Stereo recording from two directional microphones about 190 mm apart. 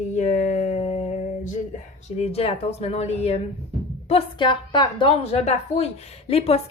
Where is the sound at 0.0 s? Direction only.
35° left (ahead or behind).